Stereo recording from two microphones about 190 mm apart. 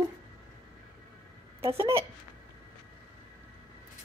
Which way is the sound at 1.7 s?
15° right (ahead or behind).